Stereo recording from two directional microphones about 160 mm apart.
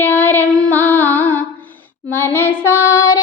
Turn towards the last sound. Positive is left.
turn(degrees=20)  # may be behind; listen again after turning